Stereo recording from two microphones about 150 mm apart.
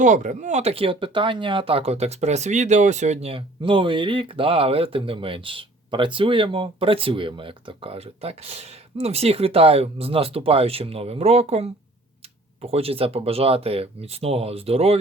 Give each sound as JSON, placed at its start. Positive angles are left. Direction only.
{"t": 0.0, "sound": "speech", "side_deg": -55}